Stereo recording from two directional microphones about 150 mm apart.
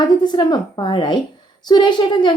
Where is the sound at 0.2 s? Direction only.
30° left (ahead or behind).